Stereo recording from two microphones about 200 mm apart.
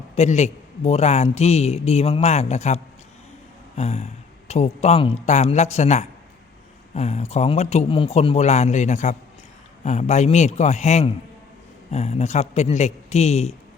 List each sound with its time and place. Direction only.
0.2 s a man's voice: 35° left (ahead or behind)